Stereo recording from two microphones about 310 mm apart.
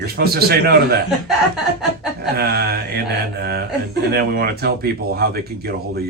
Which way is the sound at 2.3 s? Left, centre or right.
Right.